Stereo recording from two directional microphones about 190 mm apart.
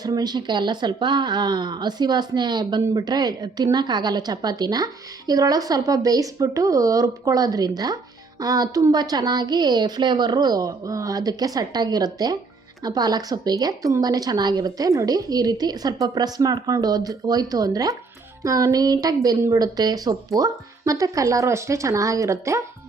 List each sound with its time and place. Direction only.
0.0 s speech: 20° right (ahead or behind)